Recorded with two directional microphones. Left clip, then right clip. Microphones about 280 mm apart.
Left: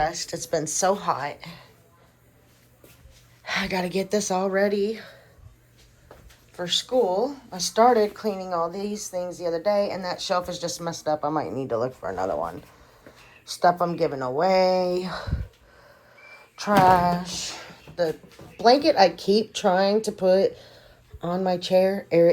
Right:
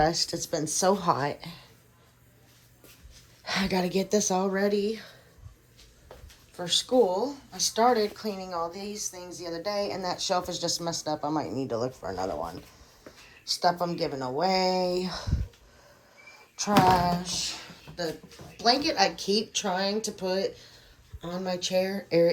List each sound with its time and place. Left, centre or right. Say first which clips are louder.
0.0 s speech: right 1 dB; right
3.4 s speech: left 2 dB; centre
6.6 s speech: left 1 dB; centre